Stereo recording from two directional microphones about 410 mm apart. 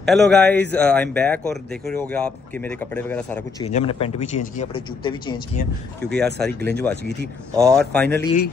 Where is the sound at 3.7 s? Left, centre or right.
Centre.